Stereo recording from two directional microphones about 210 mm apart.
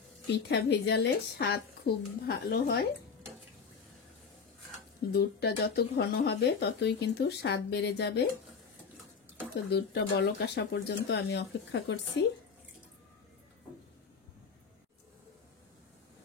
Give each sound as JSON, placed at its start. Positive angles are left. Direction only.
{"t": 0.5, "sound": "speech", "side_deg": 50}
{"t": 5.1, "sound": "speech", "side_deg": 50}
{"t": 9.7, "sound": "speech", "side_deg": 50}